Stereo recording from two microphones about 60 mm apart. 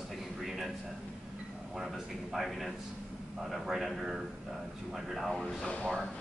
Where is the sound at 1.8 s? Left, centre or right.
Centre.